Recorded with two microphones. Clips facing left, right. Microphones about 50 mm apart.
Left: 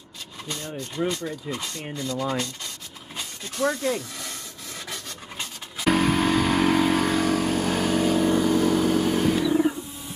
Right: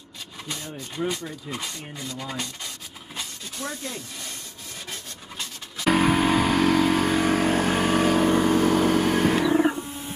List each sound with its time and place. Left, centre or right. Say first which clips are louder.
1.0 s speech: left 1 dB; centre
1.5 s speech: left 1 dB; centre
2.0 s rub: left 8 dB; centre
3.6 s speech: left 10 dB; left
5.9 s vehicle: right 1 dB; centre
6.5 s vehicle: even; centre
7.2 s vehicle: right 2 dB; right
8.0 s vehicle: even; right